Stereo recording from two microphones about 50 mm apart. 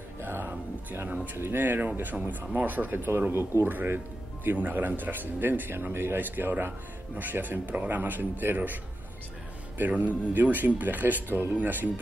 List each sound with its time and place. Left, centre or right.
0.2 s speech: right
9.8 s speech: right